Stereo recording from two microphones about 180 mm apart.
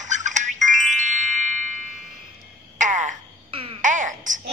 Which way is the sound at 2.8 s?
45° right (ahead or behind).